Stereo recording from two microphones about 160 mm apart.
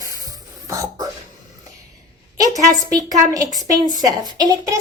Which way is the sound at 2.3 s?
20° right (ahead or behind).